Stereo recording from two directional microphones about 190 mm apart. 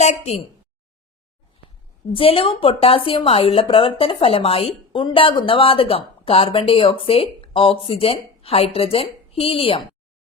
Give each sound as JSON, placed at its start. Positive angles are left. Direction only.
{"t": 0.0, "sound": "a woman's voice", "side_deg": 35}
{"t": 2.1, "sound": "a woman's voice", "side_deg": 30}